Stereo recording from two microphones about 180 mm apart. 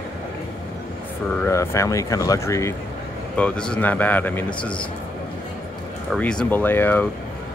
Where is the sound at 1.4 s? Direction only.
15° left (ahead or behind).